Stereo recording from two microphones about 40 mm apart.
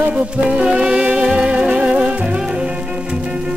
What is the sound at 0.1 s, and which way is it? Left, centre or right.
Music, right.